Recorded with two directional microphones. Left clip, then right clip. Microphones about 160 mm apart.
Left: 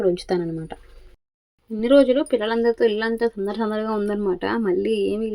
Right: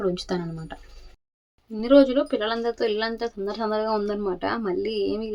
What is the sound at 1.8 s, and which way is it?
Speech, 10° left (ahead or behind).